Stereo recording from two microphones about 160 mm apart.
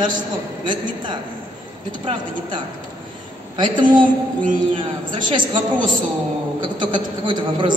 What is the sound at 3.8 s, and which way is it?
A woman's voice, 30° right (ahead or behind).